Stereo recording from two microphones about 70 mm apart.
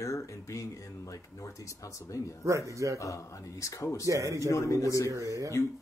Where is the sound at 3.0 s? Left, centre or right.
Left.